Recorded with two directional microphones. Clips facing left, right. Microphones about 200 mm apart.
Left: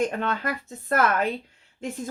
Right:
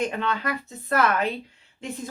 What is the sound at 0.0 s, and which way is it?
Speech, 45° left (ahead or behind).